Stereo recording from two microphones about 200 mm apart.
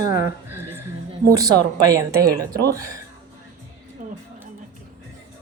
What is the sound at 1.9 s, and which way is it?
Speech, 15° right (ahead or behind).